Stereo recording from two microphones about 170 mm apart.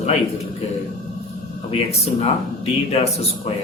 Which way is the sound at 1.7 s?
35° left (ahead or behind).